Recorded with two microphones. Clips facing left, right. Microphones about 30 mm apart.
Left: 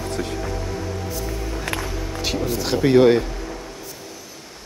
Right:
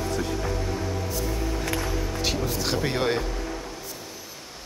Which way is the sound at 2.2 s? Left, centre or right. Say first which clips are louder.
Left 5 dB; centre.